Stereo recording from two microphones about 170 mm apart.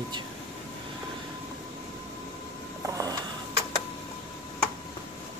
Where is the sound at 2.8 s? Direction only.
20° right (ahead or behind).